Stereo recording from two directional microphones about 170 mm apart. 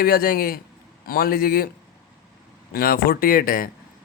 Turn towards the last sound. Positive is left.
turn(degrees=60)  # may be behind; listen again after turning